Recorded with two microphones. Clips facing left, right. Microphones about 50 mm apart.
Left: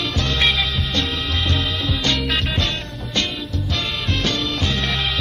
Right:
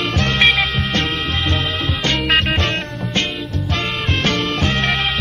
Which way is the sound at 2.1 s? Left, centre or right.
Right.